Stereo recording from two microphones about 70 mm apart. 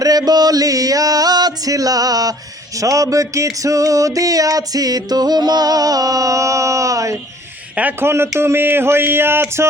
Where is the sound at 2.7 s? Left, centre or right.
Right.